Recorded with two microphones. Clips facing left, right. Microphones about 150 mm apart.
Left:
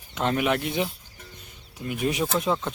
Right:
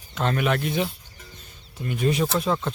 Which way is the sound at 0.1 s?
20° left (ahead or behind).